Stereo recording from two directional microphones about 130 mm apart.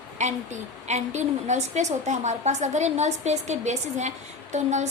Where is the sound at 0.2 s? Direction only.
65° right (ahead or behind).